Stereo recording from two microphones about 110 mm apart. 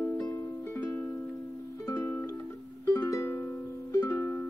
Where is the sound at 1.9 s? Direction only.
25° left (ahead or behind).